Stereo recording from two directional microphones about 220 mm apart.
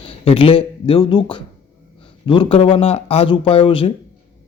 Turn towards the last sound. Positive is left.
turn(degrees=25)  # may be behind; listen again after turning